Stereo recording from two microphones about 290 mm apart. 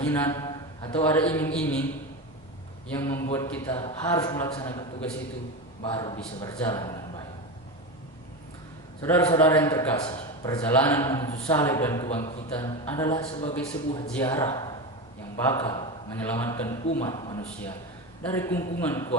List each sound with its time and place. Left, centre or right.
0.1 s a sound: centre
1.0 s a man's voice: centre
2.9 s a man's voice: centre
9.0 s a man's voice: centre